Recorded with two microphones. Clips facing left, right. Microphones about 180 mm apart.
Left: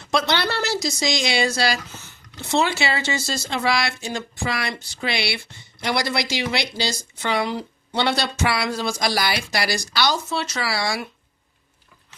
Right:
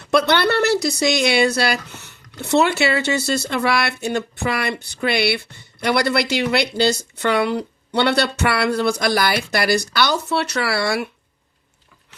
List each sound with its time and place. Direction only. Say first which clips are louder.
0.0 s speech: right 5 dB; 60° right (ahead or behind)